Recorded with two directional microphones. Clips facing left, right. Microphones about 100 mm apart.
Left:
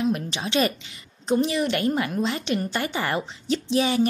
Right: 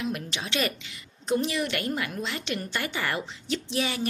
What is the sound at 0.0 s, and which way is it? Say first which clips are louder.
A woman's voice: left 7 dB; 30° left (ahead or behind).